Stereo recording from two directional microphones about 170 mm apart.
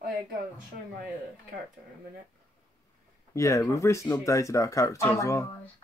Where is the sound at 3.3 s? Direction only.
20° left (ahead or behind).